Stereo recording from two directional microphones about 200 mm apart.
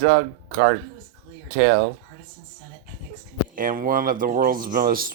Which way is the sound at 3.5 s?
45° right (ahead or behind).